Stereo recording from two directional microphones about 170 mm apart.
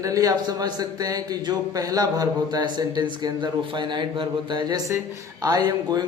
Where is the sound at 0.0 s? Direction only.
20° right (ahead or behind).